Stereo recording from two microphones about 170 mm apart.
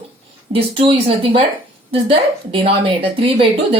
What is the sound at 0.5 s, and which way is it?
A woman's voice, 35° right (ahead or behind).